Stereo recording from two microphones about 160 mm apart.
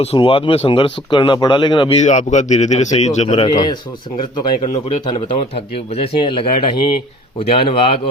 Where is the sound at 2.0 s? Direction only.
50° left (ahead or behind).